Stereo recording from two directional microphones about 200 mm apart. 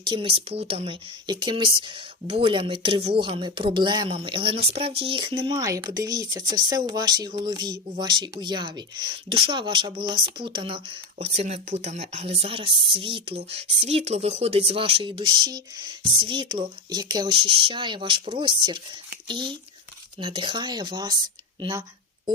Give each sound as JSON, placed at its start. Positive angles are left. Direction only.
{"t": 0.0, "sound": "speech", "side_deg": -25}